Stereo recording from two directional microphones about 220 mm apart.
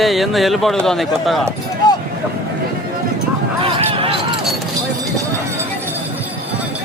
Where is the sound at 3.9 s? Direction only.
25° right (ahead or behind).